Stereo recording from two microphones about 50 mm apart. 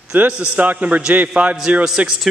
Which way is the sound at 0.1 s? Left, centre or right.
Right.